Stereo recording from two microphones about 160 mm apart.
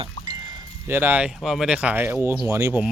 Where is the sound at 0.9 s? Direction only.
15° right (ahead or behind).